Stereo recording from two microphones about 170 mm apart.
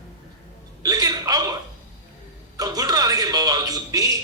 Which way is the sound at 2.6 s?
20° right (ahead or behind).